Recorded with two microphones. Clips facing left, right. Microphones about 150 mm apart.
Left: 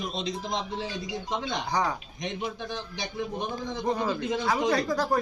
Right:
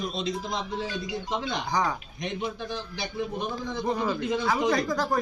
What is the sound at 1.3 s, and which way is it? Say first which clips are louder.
Speech: even; 20° left (ahead or behind).